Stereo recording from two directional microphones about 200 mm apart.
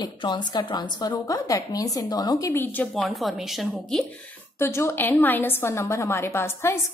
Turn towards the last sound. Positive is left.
turn(degrees=15)  # may be behind; listen again after turning